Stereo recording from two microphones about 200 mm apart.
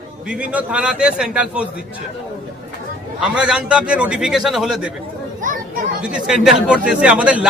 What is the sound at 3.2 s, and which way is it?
A man's voice, 5° right (ahead or behind).